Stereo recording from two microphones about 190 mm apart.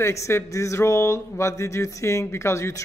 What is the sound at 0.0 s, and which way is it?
Speech, 15° left (ahead or behind).